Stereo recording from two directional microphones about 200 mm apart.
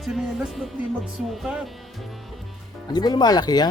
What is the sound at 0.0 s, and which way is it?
Music, centre (ahead or behind).